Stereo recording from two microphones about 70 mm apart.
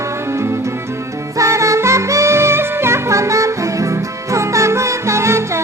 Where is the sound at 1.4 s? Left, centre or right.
Right.